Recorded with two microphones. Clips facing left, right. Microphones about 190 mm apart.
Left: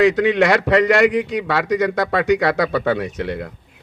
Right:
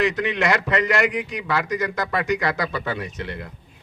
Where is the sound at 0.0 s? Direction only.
65° left (ahead or behind).